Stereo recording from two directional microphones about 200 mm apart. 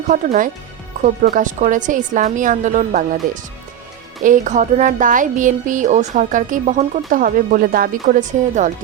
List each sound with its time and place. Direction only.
0.1 s speech: 40° right (ahead or behind)
4.2 s speech: 40° right (ahead or behind)